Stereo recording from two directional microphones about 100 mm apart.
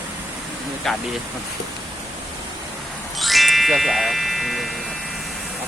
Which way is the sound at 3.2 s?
Centre (ahead or behind).